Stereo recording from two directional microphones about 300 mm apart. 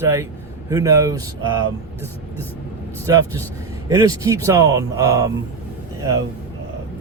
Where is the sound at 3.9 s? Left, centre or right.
Centre.